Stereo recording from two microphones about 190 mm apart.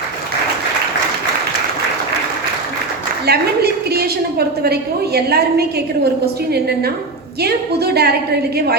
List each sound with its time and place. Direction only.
3.2 s a woman's voice: 55° right (ahead or behind)
7.4 s a woman's voice: 55° right (ahead or behind)